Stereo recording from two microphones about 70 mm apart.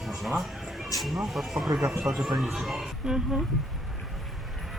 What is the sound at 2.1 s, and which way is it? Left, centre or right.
Speech, right.